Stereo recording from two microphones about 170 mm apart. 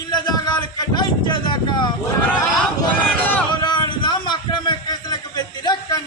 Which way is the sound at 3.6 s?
25° left (ahead or behind).